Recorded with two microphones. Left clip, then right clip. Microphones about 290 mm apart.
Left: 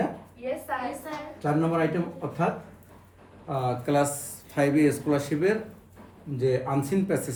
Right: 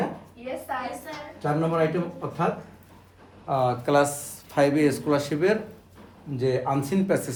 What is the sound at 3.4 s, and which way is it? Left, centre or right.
Speech, centre.